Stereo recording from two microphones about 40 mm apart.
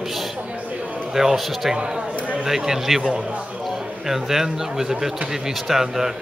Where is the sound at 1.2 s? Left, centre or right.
Centre.